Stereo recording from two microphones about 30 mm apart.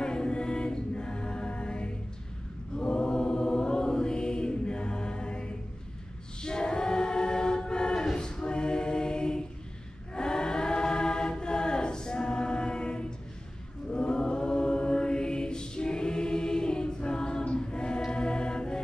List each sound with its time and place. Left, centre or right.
0.0 s choir: left
2.8 s chant: left
6.4 s choir: left
8.2 s a capella: left
10.1 s choir: left